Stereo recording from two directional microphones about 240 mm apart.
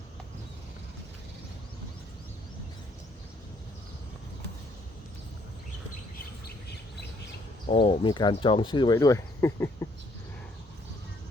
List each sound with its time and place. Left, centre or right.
7.7 s speech: left